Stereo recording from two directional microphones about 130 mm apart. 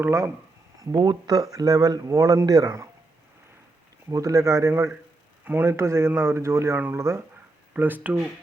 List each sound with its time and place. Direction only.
0.0 s speech: 20° right (ahead or behind)
4.1 s speech: 25° right (ahead or behind)